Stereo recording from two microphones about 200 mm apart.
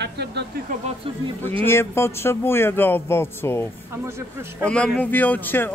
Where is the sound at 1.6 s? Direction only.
10° left (ahead or behind).